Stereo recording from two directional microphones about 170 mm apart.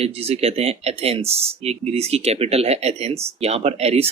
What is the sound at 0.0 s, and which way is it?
Speech, 35° right (ahead or behind).